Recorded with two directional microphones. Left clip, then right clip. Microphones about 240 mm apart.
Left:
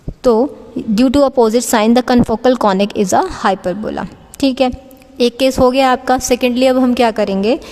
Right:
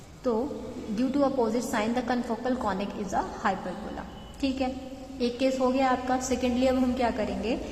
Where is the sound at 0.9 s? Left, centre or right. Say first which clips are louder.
Left 15 dB; left.